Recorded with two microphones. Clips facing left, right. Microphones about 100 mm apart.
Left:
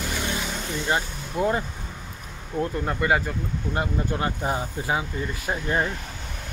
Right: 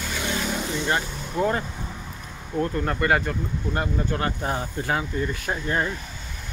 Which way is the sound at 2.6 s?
10° left (ahead or behind).